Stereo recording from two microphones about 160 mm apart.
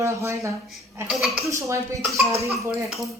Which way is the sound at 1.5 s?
20° right (ahead or behind).